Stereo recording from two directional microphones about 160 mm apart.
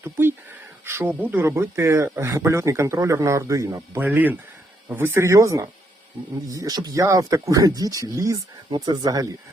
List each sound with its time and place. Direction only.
0.0 s speech: 15° right (ahead or behind)